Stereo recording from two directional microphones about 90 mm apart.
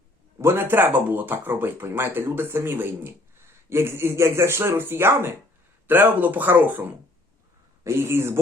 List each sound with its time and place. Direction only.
0.3 s speech: 25° right (ahead or behind)
7.9 s speech: 30° right (ahead or behind)